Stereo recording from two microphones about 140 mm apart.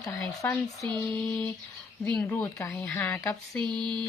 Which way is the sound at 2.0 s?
10° left (ahead or behind).